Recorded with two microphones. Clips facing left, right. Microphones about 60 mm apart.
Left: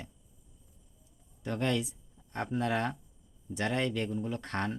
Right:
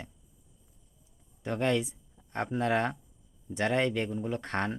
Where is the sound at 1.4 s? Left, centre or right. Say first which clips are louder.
Right 3 dB; centre.